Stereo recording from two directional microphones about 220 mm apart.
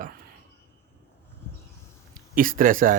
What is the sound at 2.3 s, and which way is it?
Speech, 40° right (ahead or behind).